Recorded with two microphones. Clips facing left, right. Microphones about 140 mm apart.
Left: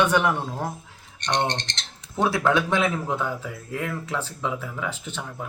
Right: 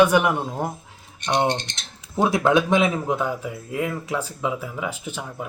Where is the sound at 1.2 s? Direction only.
10° right (ahead or behind).